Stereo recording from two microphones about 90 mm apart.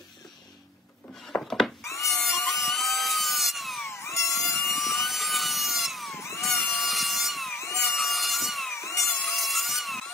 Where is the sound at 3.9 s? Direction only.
30° left (ahead or behind).